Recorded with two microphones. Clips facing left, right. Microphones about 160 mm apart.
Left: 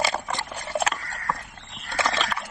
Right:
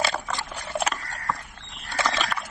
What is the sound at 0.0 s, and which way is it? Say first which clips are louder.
Pig: left 1 dB; 20° left (ahead or behind).